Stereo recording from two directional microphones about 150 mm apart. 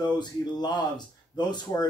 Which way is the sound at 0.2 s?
30° left (ahead or behind).